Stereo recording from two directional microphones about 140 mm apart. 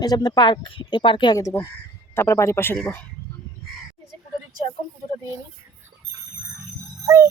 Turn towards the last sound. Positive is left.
turn(degrees=-20)  # may be behind; listen again after turning